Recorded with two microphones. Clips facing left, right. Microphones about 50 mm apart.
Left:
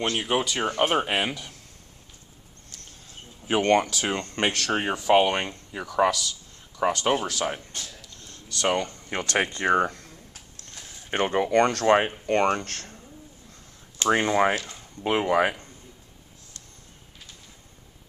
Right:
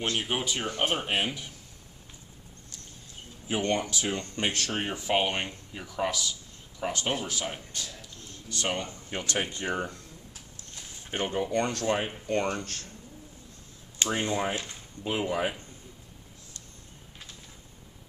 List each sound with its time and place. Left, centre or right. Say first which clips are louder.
0.0 s speech: left 5 dB; left
0.4 s speech: left 5 dB; left
3.4 s speech: left 7 dB; left
6.8 s speech: left 7 dB; left
9.1 s speech: left 6 dB; left
11.1 s speech: left 6 dB; left
14.0 s speech: left 8 dB; left